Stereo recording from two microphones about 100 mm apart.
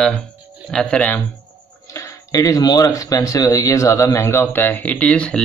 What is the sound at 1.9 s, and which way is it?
Speech, 35° left (ahead or behind).